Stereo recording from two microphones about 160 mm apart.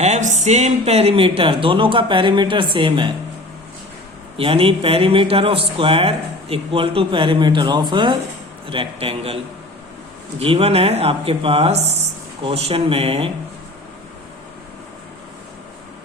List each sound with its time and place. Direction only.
0.0 s speech: 45° right (ahead or behind); by 3.1 s 30° right (ahead or behind)
4.4 s speech: 35° right (ahead or behind)
10.4 s speech: 35° right (ahead or behind)